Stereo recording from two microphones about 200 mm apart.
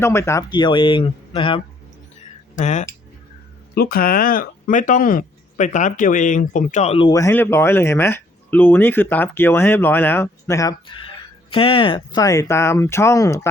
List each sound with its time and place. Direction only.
0.0 s speech: 15° left (ahead or behind)
2.6 s speech: 35° left (ahead or behind)
3.8 s speech: 50° left (ahead or behind); by 7.1 s 30° left (ahead or behind)
7.1 s speech: 15° left (ahead or behind)